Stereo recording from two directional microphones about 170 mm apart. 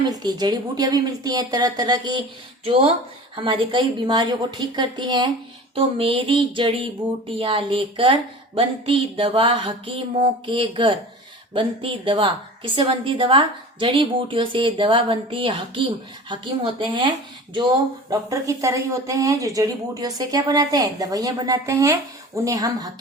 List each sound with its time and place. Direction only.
0.0 s speech: 25° right (ahead or behind)
3.3 s a woman's voice: 30° right (ahead or behind)
18.1 s speech: 20° right (ahead or behind)